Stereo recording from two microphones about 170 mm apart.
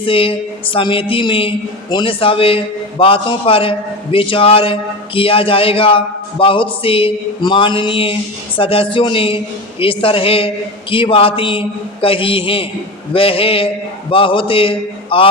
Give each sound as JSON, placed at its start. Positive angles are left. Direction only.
{"t": 0.0, "sound": "a woman's voice", "side_deg": 30}